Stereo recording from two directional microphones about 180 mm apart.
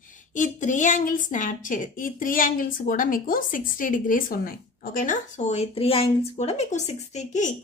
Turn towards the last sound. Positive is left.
turn(degrees=40)  # may be behind; listen again after turning